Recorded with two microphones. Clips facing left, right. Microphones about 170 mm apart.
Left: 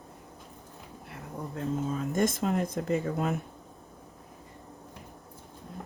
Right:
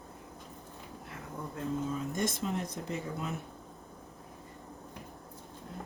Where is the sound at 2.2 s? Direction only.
50° left (ahead or behind).